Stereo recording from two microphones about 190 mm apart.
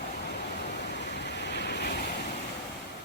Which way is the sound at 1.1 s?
60° left (ahead or behind).